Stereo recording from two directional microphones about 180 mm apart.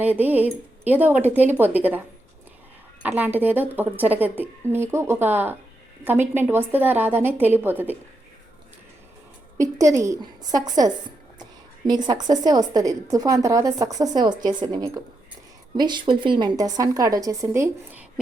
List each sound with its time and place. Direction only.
0.0 s a woman's voice: 10° right (ahead or behind)
3.0 s a woman's voice: 10° right (ahead or behind)
9.6 s a woman's voice: 15° right (ahead or behind)
12.0 s a woman's voice: 20° right (ahead or behind)